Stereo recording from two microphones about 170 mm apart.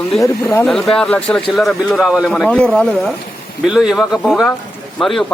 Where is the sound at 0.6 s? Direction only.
Centre (ahead or behind).